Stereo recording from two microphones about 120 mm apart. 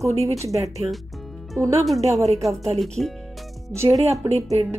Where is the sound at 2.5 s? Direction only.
60° right (ahead or behind).